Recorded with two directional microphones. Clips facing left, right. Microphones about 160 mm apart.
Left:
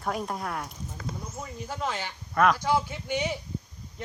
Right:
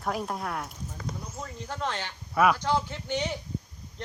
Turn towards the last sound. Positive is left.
turn(degrees=10)  # may be behind; listen again after turning